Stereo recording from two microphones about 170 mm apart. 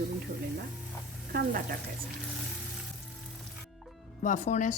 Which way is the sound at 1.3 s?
60° right (ahead or behind).